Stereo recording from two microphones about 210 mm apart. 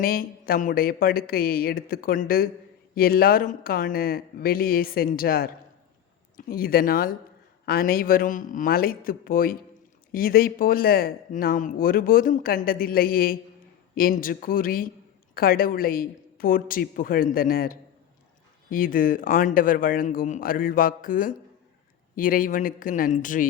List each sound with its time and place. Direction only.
0.0 s a man's voice: 45° left (ahead or behind)